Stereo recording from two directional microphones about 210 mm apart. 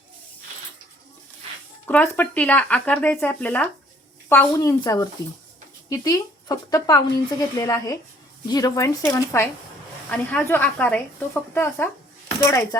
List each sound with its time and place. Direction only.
1.9 s speech: 10° left (ahead or behind)